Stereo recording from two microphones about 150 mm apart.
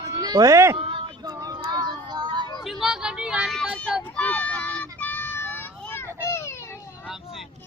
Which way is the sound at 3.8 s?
5° left (ahead or behind).